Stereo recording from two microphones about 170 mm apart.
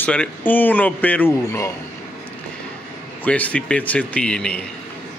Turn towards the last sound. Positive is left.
turn(degrees=5)  # may be behind; listen again after turning